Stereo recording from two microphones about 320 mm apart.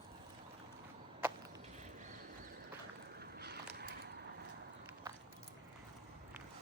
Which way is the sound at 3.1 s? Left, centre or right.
Right.